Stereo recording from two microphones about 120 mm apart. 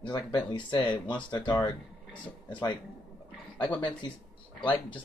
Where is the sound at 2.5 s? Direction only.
40° left (ahead or behind).